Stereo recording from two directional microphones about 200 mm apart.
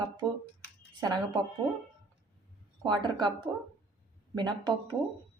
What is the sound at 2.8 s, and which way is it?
A woman's voice, 20° right (ahead or behind).